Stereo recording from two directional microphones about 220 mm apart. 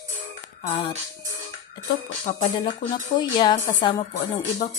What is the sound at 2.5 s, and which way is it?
Speech, 20° left (ahead or behind).